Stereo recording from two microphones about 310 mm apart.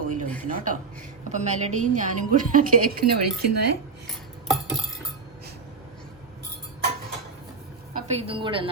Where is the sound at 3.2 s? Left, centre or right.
Right.